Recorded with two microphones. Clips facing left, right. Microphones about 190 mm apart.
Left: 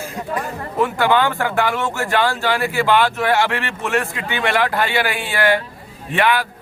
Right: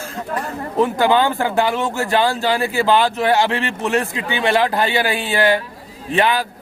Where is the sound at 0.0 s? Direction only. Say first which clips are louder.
Left 1 dB; 15° left (ahead or behind).